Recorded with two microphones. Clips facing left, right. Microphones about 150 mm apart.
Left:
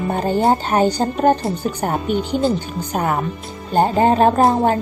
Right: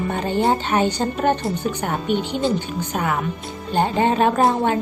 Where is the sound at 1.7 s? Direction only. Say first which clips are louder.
Left 2 dB; 40° left (ahead or behind).